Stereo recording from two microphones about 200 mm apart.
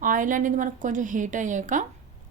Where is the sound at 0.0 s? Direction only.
40° right (ahead or behind).